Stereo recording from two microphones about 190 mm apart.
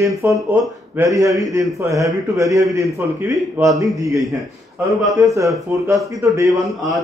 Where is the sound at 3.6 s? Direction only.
20° right (ahead or behind).